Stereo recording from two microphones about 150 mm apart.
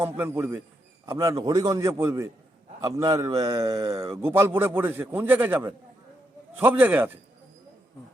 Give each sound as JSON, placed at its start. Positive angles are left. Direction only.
{"t": 0.0, "sound": "a man's voice", "side_deg": -15}